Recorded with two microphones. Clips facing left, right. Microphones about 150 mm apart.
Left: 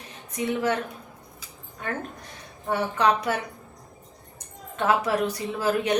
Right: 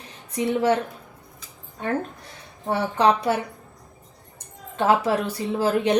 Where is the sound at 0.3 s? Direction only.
30° right (ahead or behind).